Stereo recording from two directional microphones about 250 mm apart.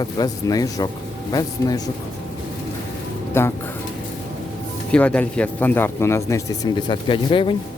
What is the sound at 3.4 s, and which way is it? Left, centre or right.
Speech, centre.